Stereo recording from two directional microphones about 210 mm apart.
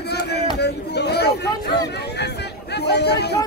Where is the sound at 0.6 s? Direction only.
50° left (ahead or behind).